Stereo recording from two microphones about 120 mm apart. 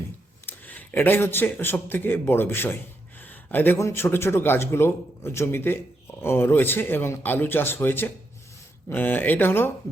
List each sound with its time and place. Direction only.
0.4 s a man's voice: 15° left (ahead or behind)